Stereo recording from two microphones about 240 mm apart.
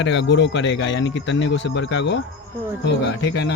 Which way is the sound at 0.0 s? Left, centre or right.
Left.